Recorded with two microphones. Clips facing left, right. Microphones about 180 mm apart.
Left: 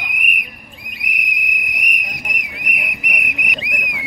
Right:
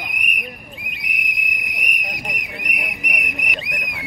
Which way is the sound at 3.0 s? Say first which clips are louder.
Left 1 dB; centre (ahead or behind).